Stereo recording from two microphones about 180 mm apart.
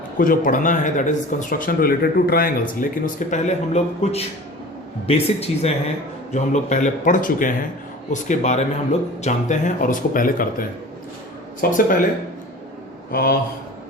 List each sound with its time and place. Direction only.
0.2 s speech: 50° left (ahead or behind)
13.1 s a man's voice: 55° left (ahead or behind)